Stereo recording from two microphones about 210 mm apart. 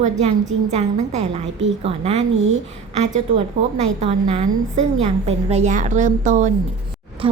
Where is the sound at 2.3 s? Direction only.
65° right (ahead or behind).